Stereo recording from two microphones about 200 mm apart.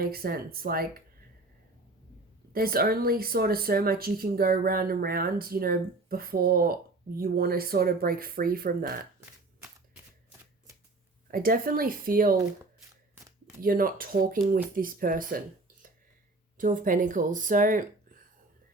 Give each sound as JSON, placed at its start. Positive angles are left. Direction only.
{"t": 0.0, "sound": "speech", "side_deg": -50}
{"t": 2.5, "sound": "speech", "side_deg": -50}
{"t": 11.3, "sound": "speech", "side_deg": -45}
{"t": 13.6, "sound": "speech", "side_deg": -45}
{"t": 16.6, "sound": "speech", "side_deg": -40}